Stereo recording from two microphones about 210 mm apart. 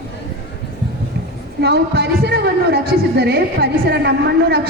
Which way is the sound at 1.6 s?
50° right (ahead or behind).